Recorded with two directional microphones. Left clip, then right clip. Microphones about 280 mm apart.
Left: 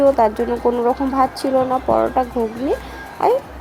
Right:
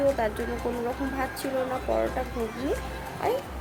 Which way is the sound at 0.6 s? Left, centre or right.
Centre.